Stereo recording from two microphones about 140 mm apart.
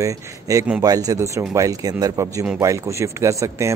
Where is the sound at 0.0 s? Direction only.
25° right (ahead or behind).